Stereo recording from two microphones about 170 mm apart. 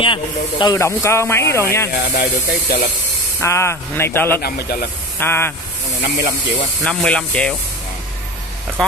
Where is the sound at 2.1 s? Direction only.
75° left (ahead or behind).